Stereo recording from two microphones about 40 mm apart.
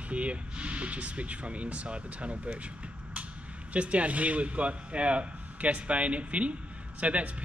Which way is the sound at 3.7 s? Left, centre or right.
Right.